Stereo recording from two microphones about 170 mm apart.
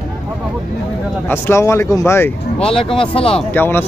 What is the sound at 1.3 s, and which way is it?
Speech, 15° left (ahead or behind).